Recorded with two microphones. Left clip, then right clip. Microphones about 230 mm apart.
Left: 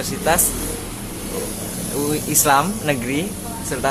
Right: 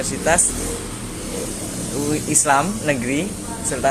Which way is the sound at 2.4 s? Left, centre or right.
Centre.